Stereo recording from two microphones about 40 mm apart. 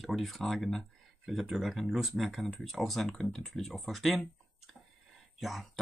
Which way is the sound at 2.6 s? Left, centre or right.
Centre.